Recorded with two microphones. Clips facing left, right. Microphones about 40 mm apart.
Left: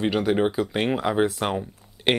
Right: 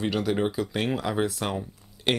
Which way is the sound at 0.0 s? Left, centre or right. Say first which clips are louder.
Left 4 dB; left.